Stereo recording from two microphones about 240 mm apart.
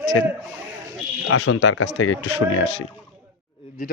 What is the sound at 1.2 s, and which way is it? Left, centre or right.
Speech, left.